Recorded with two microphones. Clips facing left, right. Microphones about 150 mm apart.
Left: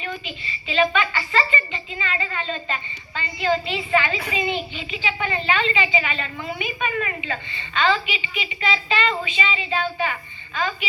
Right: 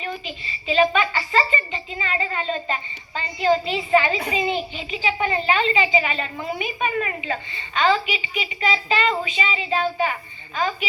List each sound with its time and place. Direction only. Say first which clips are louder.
0.0 s a child's voice: right 1 dB; 35° right (ahead or behind)